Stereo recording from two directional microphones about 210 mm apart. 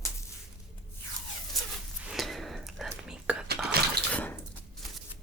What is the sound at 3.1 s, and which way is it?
Whispering, 5° right (ahead or behind).